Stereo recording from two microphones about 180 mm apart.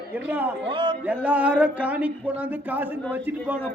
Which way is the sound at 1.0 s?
5° right (ahead or behind).